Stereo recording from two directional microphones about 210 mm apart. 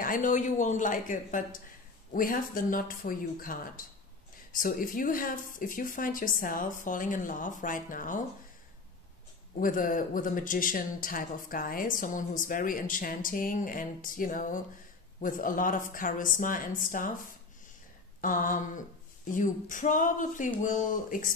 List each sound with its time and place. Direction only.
0.0 s speech: 40° left (ahead or behind)
9.6 s speech: 40° left (ahead or behind)
18.2 s speech: 40° left (ahead or behind)